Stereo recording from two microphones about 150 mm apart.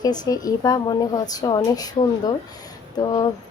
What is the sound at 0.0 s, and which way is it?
Speech, 25° left (ahead or behind).